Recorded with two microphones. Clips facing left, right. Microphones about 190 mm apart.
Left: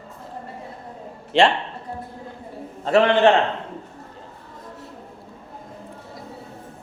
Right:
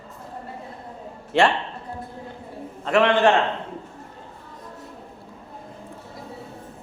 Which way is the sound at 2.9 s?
30° left (ahead or behind).